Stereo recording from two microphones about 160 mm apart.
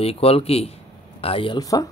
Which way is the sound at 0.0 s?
35° left (ahead or behind).